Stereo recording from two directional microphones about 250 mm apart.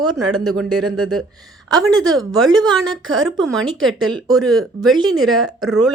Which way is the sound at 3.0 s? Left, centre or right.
Right.